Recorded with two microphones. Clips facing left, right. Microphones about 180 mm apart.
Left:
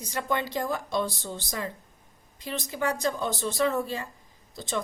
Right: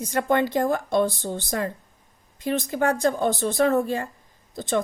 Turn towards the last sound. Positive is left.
turn(degrees=-50)  # may be behind; listen again after turning